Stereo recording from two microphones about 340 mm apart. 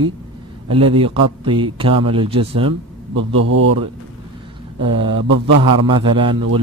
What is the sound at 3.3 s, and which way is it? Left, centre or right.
Speech, right.